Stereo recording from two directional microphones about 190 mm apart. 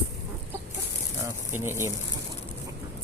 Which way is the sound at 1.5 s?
15° right (ahead or behind).